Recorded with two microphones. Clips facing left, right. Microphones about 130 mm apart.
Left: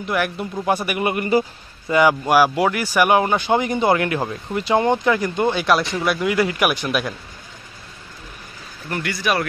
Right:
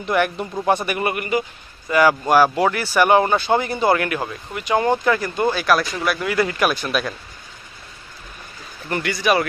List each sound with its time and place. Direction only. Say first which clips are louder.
0.0 s speech: right 2 dB; 5° left (ahead or behind)
1.1 s a man's voice: left 4 dB; 30° left (ahead or behind)
2.2 s speech: even; 10° left (ahead or behind)
8.8 s speech: right 3 dB; centre (ahead or behind)